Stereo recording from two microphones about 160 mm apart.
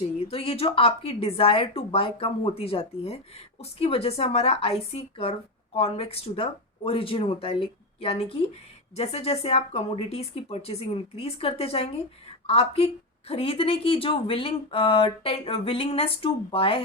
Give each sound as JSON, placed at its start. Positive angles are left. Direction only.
{"t": 0.0, "sound": "a woman's voice", "side_deg": 40}